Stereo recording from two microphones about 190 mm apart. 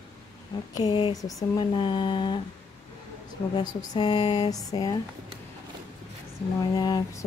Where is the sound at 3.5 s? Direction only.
20° left (ahead or behind).